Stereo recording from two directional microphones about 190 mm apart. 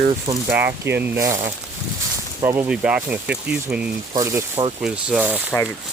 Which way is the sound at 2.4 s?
15° right (ahead or behind).